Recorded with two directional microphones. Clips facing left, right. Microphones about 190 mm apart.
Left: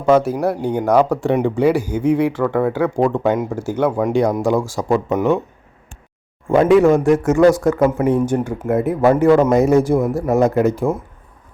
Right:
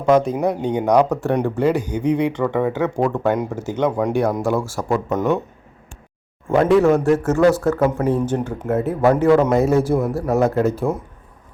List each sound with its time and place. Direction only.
0.0 s speech: 5° left (ahead or behind)
6.5 s speech: 15° left (ahead or behind)